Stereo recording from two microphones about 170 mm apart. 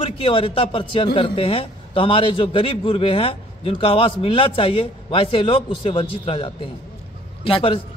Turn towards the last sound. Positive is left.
turn(degrees=30)  # may be behind; listen again after turning